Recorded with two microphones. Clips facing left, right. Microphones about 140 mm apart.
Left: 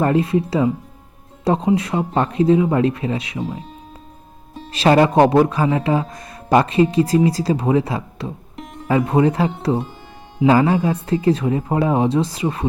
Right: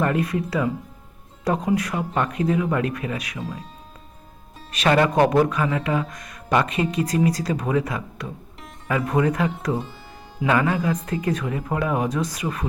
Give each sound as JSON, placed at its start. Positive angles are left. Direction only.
{"t": 0.0, "sound": "speech", "side_deg": 30}
{"t": 4.7, "sound": "speech", "side_deg": 30}